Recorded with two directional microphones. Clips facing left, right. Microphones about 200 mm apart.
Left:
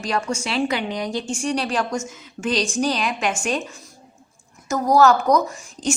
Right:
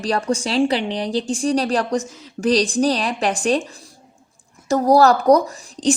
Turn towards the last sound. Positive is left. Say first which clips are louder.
# right 5 dB
turn(degrees=-35)  # may be behind; listen again after turning